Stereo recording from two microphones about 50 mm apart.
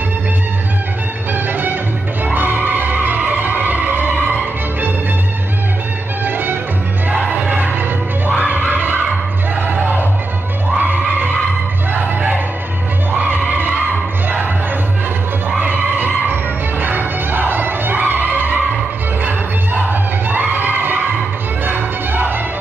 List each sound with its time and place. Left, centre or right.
1.3 s music: right
6.2 s music: right
7.1 s crowd: right
10.8 s music: right
13.5 s skidding: right
15.6 s music: right